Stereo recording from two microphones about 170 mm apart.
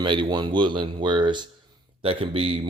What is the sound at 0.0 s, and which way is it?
Speech, 25° right (ahead or behind).